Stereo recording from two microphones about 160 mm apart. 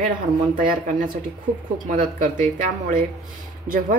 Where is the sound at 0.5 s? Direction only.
60° right (ahead or behind).